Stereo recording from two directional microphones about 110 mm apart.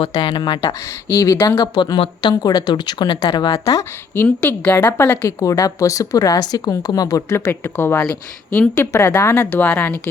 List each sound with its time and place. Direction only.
0.1 s speech: 40° left (ahead or behind)
1.0 s speech: 30° left (ahead or behind)
4.1 s a woman's voice: 20° left (ahead or behind)
8.9 s a woman's voice: 25° left (ahead or behind)